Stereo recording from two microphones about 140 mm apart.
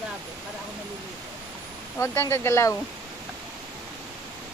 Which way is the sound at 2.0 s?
20° left (ahead or behind).